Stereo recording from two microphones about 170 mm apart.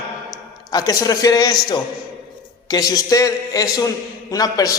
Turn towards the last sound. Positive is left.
turn(degrees=20)  # may be behind; listen again after turning